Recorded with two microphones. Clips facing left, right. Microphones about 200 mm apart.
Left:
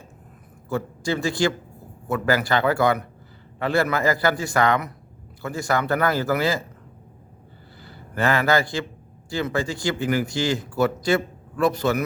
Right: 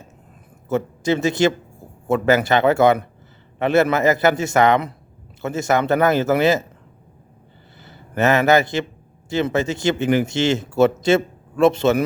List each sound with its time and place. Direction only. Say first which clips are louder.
0.7 s a man's voice: right 5 dB; 20° right (ahead or behind)
7.8 s a man's voice: right 5 dB; 20° right (ahead or behind)